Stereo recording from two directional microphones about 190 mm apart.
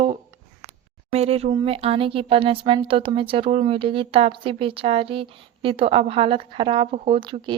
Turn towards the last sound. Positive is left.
turn(degrees=-25)  # may be behind; listen again after turning